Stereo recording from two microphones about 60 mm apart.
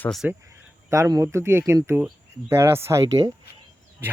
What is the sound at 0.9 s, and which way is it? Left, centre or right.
Speech, right.